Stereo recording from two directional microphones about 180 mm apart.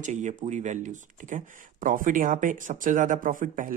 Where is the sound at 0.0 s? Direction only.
40° right (ahead or behind).